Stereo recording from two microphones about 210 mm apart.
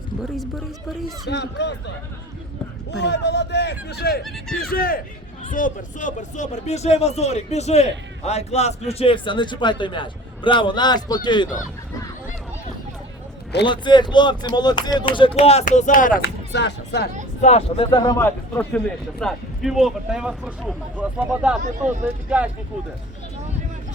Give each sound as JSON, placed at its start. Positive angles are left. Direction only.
{"t": 1.3, "sound": "speech", "side_deg": 55}
{"t": 2.9, "sound": "a man's voice", "side_deg": 55}
{"t": 13.7, "sound": "speech", "side_deg": 20}
{"t": 16.5, "sound": "speech", "side_deg": 55}
{"t": 17.4, "sound": "speech", "side_deg": 30}
{"t": 21.6, "sound": "speech", "side_deg": -35}
{"t": 22.0, "sound": "speech", "side_deg": -5}